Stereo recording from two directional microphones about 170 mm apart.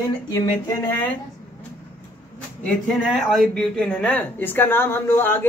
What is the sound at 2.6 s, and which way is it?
Speech, centre (ahead or behind).